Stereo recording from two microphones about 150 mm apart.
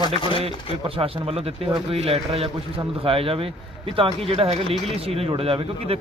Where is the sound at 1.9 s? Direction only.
45° right (ahead or behind).